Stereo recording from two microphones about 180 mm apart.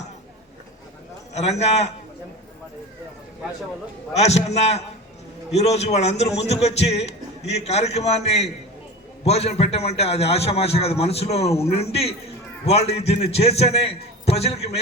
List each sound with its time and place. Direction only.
1.3 s a man's voice: 40° left (ahead or behind)
4.1 s a man's voice: 35° left (ahead or behind)